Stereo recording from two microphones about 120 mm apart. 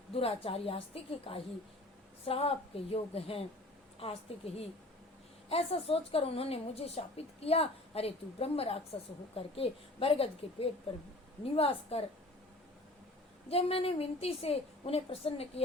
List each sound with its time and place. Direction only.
0.1 s a woman's voice: 55° left (ahead or behind)
13.5 s a woman's voice: 55° left (ahead or behind)